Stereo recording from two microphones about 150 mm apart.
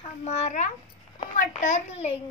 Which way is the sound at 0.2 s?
50° left (ahead or behind).